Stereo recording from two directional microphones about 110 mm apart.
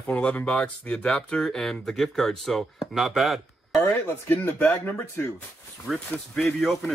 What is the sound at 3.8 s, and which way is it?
Speech, 20° left (ahead or behind).